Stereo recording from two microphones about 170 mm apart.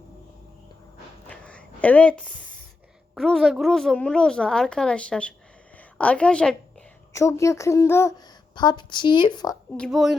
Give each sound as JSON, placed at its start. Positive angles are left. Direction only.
{"t": 1.3, "sound": "a sound", "side_deg": 5}
{"t": 3.2, "sound": "a woman's voice", "side_deg": 0}
{"t": 5.7, "sound": "a sound", "side_deg": 5}
{"t": 7.1, "sound": "speech", "side_deg": 15}
{"t": 8.5, "sound": "a woman's voice", "side_deg": 25}
{"t": 9.7, "sound": "a woman's voice", "side_deg": 0}